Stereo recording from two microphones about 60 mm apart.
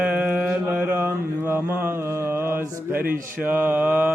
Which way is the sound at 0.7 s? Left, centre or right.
Right.